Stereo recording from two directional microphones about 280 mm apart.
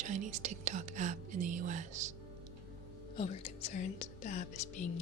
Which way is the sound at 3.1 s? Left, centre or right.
Left.